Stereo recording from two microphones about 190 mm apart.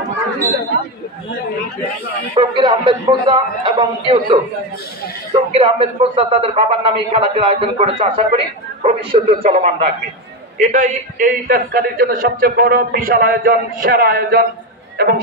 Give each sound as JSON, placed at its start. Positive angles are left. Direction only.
{"t": 2.3, "sound": "a man's voice", "side_deg": -25}
{"t": 5.5, "sound": "a man's voice", "side_deg": -30}